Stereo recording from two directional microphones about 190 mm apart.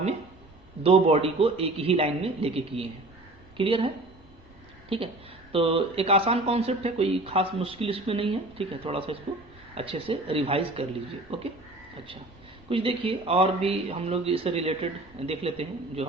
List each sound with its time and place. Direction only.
0.8 s speech: 30° right (ahead or behind)
5.5 s speech: 30° right (ahead or behind)
12.6 s speech: 30° right (ahead or behind)